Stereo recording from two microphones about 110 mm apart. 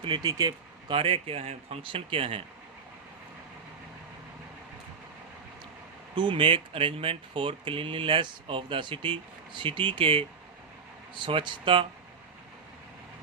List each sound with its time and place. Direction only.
0.0 s speech: 45° right (ahead or behind)
0.9 s speech: 55° right (ahead or behind)
6.1 s speech: 50° right (ahead or behind)